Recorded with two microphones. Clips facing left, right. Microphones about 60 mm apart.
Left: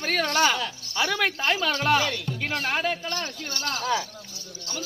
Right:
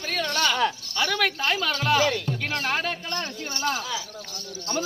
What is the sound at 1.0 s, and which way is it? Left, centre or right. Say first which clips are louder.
Speech: even; centre.